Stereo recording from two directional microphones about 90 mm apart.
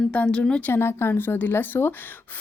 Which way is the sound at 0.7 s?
25° left (ahead or behind).